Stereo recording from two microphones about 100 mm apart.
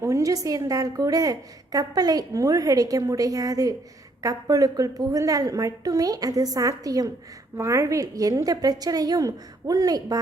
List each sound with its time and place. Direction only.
0.0 s a woman's voice: 35° right (ahead or behind)